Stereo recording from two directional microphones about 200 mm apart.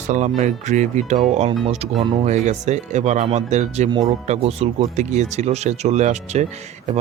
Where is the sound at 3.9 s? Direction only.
20° right (ahead or behind).